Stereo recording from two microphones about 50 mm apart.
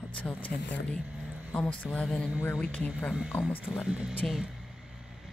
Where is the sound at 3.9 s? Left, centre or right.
Centre.